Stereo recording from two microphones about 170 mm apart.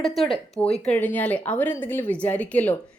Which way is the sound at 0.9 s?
10° left (ahead or behind).